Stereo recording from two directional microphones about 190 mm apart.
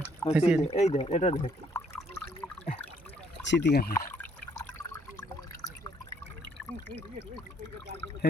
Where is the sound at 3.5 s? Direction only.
60° left (ahead or behind).